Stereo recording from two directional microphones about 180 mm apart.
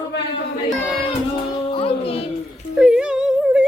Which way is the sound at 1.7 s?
30° left (ahead or behind).